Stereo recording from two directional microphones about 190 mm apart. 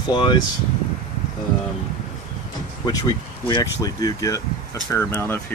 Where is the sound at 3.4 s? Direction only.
20° left (ahead or behind).